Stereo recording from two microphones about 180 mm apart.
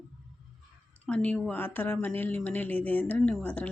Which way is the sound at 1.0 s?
5° left (ahead or behind).